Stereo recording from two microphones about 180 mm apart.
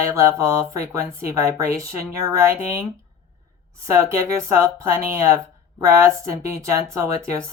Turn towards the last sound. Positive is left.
turn(degrees=-15)  # may be behind; listen again after turning